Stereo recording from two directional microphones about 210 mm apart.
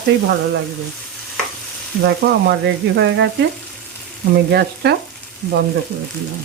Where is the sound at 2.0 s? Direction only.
55° right (ahead or behind).